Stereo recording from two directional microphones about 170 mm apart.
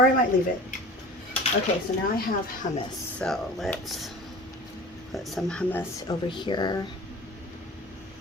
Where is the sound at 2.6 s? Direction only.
50° left (ahead or behind).